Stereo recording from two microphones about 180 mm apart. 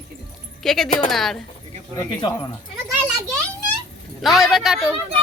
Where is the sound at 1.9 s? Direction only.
20° left (ahead or behind).